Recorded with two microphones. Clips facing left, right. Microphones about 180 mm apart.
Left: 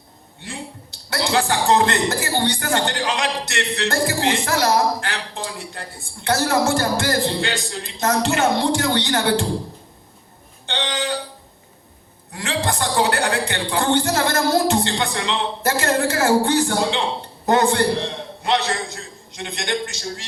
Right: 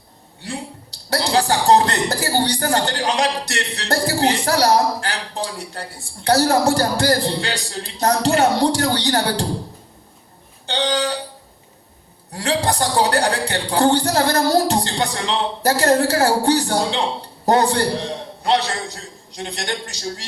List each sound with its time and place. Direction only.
0.4 s speech: 35° right (ahead or behind)
10.7 s a sound: 35° right (ahead or behind)
12.3 s a man's voice: 35° right (ahead or behind)